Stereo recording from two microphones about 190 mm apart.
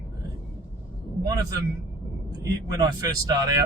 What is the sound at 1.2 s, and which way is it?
Speech, 20° right (ahead or behind).